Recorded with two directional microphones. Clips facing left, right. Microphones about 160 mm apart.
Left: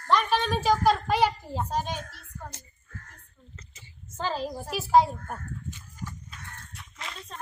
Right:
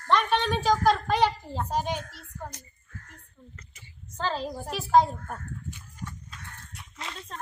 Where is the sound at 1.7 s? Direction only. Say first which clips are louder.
Right 2 dB; 15° right (ahead or behind).